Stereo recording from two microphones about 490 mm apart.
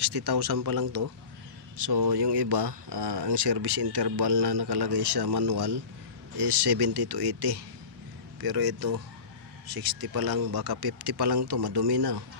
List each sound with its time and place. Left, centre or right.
0.0 s speech: right
1.7 s speech: right